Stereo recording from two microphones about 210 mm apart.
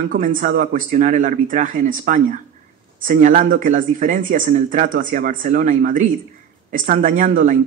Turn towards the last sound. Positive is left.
turn(degrees=-40)  # may be behind; listen again after turning